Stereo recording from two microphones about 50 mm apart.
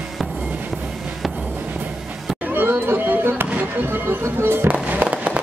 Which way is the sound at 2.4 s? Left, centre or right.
Right.